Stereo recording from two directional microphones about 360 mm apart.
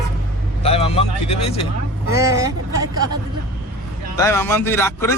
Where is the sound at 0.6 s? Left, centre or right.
Centre.